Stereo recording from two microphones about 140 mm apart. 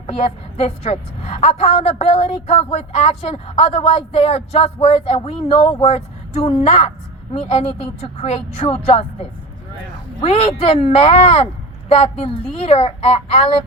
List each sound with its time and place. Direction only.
0.1 s a woman's voice: 45° left (ahead or behind)
10.2 s a woman's voice: 45° left (ahead or behind)